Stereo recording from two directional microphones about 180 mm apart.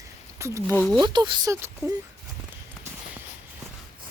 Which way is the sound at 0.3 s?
15° right (ahead or behind).